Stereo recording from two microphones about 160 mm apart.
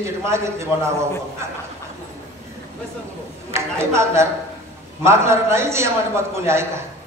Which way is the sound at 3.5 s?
15° right (ahead or behind).